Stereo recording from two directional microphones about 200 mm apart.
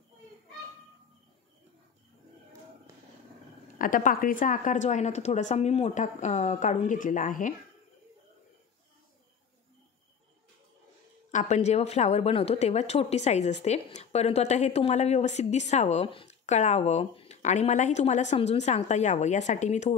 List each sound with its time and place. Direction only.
3.7 s a woman's voice: 45° left (ahead or behind)
11.3 s a woman's voice: 35° left (ahead or behind)